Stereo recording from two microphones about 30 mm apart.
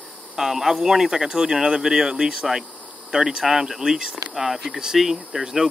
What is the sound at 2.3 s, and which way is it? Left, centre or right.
Speech, centre.